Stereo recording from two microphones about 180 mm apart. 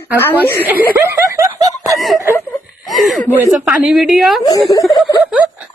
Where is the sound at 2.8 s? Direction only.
Centre (ahead or behind).